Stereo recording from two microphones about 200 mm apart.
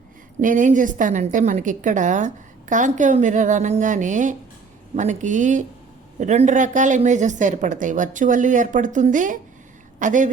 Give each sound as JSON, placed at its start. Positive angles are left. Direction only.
{"t": 0.4, "sound": "a woman's voice", "side_deg": -40}